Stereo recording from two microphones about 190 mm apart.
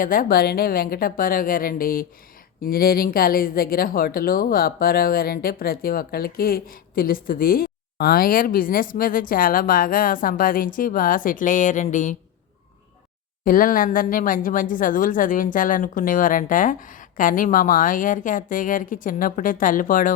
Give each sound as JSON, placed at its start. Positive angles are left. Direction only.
{"t": 0.0, "sound": "speech", "side_deg": 50}
{"t": 13.4, "sound": "speech", "side_deg": 45}